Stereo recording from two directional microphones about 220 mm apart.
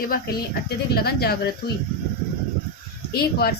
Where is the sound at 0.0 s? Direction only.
40° left (ahead or behind).